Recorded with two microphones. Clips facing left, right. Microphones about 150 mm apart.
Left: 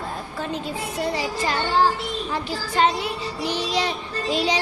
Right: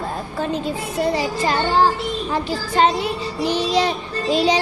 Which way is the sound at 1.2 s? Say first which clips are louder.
Right 4 dB; 35° right (ahead or behind).